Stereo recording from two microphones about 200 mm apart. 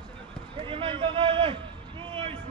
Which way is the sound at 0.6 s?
25° right (ahead or behind).